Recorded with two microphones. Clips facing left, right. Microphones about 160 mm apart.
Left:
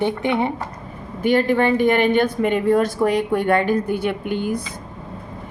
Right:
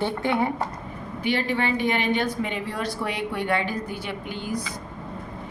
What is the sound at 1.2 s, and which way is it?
Speech, 50° left (ahead or behind).